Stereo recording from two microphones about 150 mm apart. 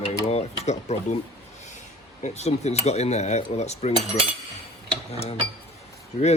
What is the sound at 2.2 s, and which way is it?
Cutlery, 45° left (ahead or behind).